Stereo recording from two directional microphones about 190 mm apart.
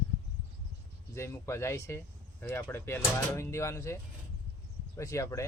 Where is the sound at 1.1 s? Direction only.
15° left (ahead or behind).